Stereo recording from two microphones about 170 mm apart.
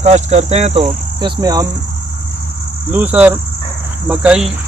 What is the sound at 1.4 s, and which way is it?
Speech, 20° right (ahead or behind).